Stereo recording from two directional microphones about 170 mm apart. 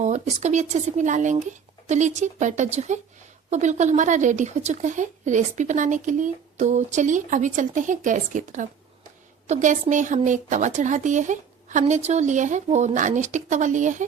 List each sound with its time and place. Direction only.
0.0 s speech: 45° right (ahead or behind)